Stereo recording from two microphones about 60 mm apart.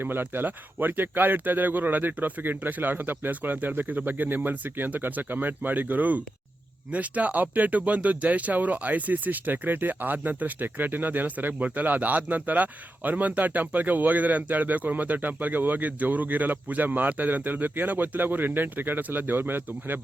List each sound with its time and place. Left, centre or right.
0.0 s speech: right